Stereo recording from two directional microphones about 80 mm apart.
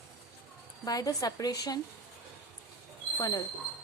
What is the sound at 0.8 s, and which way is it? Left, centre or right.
Speech, left.